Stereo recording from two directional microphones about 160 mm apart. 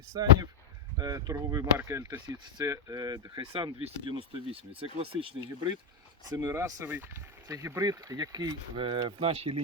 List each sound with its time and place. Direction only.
0.1 s speech: 20° right (ahead or behind)
6.3 s speech: 15° right (ahead or behind); by 9.6 s 40° right (ahead or behind)